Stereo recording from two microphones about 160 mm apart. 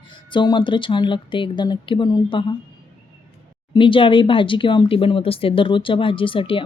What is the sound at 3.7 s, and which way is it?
Speech, 30° left (ahead or behind).